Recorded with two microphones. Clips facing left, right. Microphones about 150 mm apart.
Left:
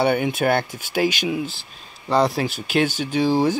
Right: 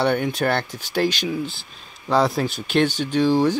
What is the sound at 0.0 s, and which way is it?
Speech, 10° left (ahead or behind).